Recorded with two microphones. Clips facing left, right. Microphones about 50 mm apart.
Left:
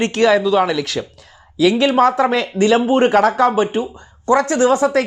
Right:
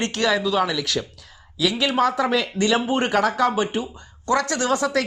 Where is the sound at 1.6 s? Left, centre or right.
Left.